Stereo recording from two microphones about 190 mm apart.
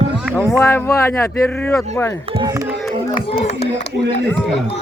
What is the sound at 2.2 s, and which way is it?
Speech, 30° right (ahead or behind).